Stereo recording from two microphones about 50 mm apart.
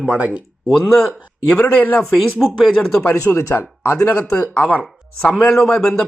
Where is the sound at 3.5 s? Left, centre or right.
Left.